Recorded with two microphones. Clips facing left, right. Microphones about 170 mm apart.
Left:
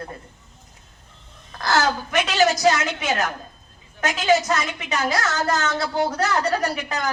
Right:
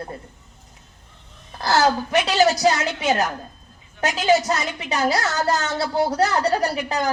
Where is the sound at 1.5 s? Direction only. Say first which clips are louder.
Right 3 dB; 30° right (ahead or behind).